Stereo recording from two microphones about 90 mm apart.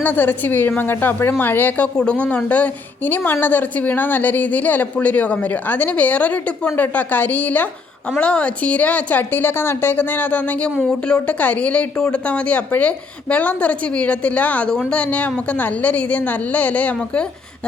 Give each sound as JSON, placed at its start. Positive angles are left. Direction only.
{"t": 0.0, "sound": "speech", "side_deg": 20}